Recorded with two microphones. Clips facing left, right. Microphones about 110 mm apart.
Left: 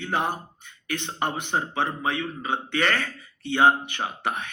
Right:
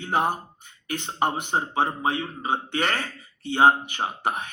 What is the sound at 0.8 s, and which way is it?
Speech, 40° right (ahead or behind).